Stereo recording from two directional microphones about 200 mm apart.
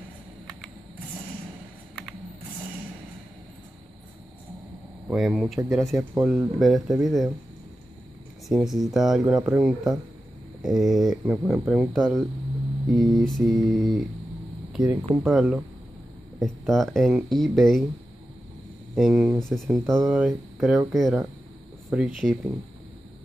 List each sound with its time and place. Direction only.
5.1 s speech: centre (ahead or behind)
8.5 s speech: centre (ahead or behind)
14.8 s speech: 15° right (ahead or behind)
15.2 s speech: 5° right (ahead or behind)
18.9 s speech: centre (ahead or behind)